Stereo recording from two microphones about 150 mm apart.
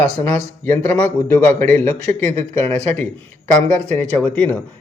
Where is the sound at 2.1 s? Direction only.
50° right (ahead or behind).